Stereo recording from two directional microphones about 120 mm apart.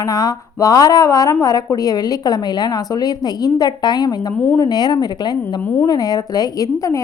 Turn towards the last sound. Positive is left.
turn(degrees=25)  # may be behind; listen again after turning